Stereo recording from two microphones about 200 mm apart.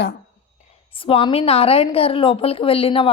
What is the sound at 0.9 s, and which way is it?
A woman's voice, 25° left (ahead or behind).